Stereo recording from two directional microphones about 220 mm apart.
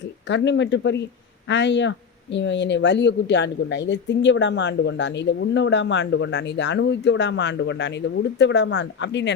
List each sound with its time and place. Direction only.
0.3 s speech: 55° left (ahead or behind)